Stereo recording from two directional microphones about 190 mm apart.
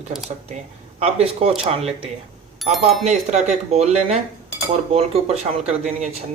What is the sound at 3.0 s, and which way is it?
Speech, 35° right (ahead or behind).